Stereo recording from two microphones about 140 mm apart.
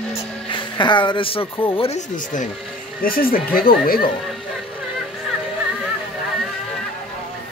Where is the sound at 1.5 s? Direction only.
40° left (ahead or behind); by 2.4 s 60° left (ahead or behind).